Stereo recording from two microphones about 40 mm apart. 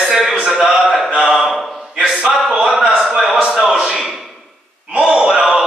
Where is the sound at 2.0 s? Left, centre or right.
Centre.